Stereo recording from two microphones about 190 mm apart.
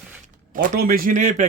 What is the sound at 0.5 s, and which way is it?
Speech, 50° right (ahead or behind).